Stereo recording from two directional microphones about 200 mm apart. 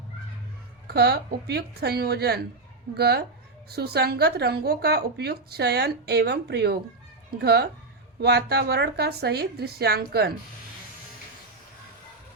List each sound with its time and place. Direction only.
0.9 s speech: 55° right (ahead or behind)